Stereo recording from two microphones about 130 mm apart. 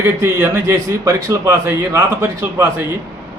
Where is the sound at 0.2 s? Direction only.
20° right (ahead or behind).